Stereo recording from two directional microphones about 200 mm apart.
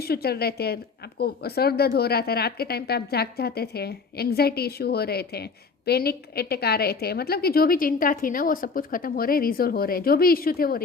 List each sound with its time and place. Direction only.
0.0 s speech: 50° left (ahead or behind)